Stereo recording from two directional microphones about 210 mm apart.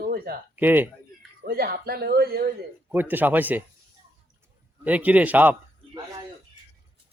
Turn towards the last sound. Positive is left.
turn(degrees=-10)  # may be behind; listen again after turning